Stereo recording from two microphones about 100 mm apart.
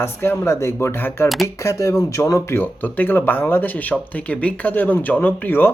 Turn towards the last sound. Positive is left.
turn(degrees=20)  # may be behind; listen again after turning